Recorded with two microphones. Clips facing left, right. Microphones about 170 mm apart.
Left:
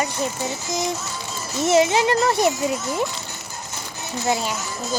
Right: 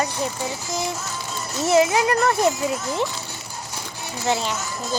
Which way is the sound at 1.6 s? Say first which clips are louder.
Even; 25° left (ahead or behind).